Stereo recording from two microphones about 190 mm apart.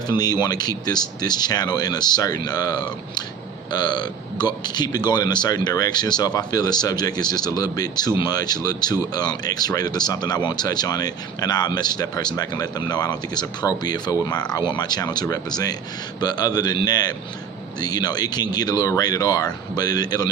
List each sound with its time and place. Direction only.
0.1 s speech: 20° left (ahead or behind)